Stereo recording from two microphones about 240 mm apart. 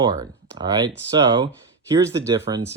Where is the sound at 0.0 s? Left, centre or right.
Centre.